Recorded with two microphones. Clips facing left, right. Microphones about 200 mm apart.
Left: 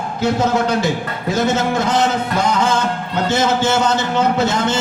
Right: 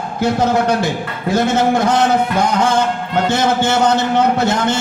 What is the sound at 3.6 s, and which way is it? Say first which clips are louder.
A man's voice: right 2 dB; 55° right (ahead or behind).